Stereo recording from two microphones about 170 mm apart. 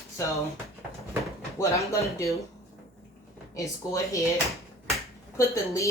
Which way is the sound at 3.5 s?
20° left (ahead or behind).